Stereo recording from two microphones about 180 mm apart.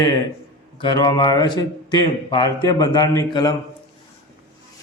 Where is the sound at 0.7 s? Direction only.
25° left (ahead or behind).